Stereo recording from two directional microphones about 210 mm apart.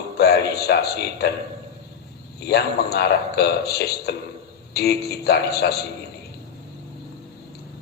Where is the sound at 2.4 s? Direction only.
50° left (ahead or behind).